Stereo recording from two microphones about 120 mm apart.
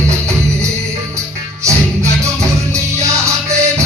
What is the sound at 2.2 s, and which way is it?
Music, 25° right (ahead or behind).